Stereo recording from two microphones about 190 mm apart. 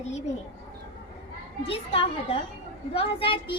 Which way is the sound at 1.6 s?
30° left (ahead or behind).